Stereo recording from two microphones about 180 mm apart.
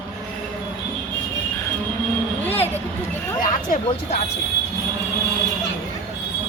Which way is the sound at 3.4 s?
45° left (ahead or behind).